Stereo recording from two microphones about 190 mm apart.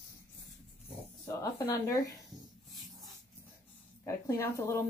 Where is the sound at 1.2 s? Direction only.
15° left (ahead or behind).